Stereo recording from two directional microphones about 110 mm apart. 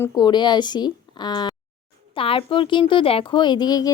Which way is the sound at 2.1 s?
55° left (ahead or behind).